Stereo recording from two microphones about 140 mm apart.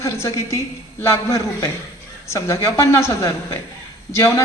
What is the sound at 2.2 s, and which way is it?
A woman's voice, 20° left (ahead or behind).